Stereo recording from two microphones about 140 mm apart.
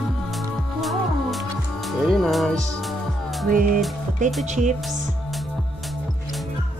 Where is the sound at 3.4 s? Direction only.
75° right (ahead or behind).